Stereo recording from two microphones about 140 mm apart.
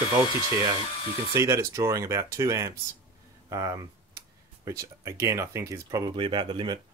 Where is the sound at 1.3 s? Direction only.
20° right (ahead or behind).